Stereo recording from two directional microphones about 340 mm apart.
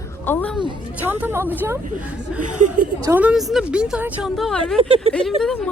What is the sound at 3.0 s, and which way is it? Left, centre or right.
A woman's voice, centre.